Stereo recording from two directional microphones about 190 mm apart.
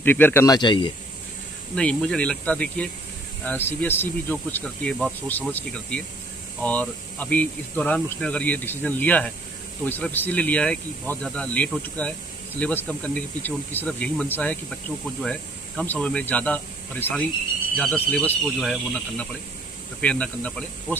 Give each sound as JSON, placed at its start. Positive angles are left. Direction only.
{"t": 0.0, "sound": "speech", "side_deg": 10}
{"t": 0.6, "sound": "speech", "side_deg": 25}
{"t": 1.8, "sound": "speech", "side_deg": 5}